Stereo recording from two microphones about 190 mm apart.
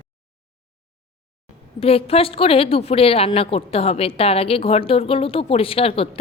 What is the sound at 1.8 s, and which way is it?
A woman's voice, 30° left (ahead or behind).